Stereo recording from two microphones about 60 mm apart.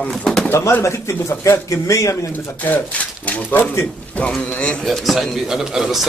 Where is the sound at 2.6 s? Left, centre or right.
Left.